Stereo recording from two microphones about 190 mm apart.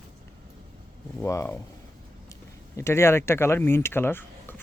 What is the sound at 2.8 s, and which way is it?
Speech, 15° left (ahead or behind).